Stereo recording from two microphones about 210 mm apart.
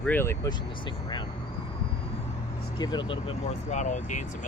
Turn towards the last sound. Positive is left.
turn(degrees=35)  # may be behind; listen again after turning